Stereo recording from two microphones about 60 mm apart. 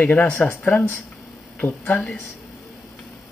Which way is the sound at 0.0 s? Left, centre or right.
Left.